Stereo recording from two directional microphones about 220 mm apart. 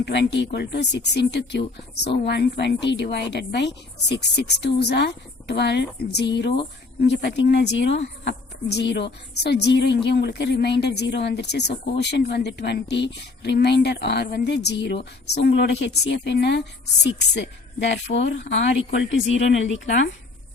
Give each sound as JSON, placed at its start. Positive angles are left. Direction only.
{"t": 0.0, "sound": "speech", "side_deg": 50}